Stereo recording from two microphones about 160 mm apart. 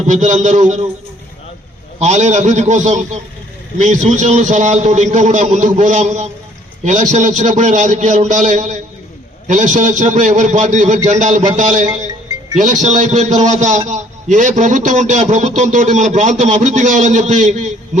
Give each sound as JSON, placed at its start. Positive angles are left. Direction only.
{"t": 0.1, "sound": "a man's voice", "side_deg": -50}
{"t": 2.0, "sound": "a man's voice", "side_deg": -45}